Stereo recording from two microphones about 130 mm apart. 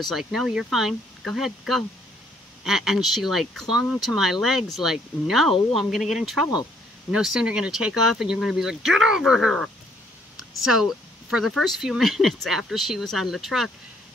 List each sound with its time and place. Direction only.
0.0 s speech: centre (ahead or behind)
10.6 s speech: centre (ahead or behind)